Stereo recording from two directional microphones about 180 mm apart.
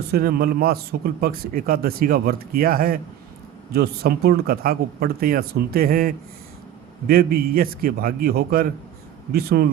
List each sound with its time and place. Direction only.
0.1 s speech: 60° right (ahead or behind)